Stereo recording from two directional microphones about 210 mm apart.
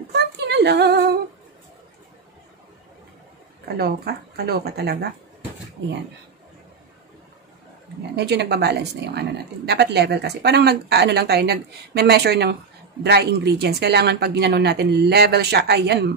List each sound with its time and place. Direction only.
0.1 s a sound: 55° right (ahead or behind)
3.6 s speech: 50° right (ahead or behind)
8.2 s speech: 55° right (ahead or behind)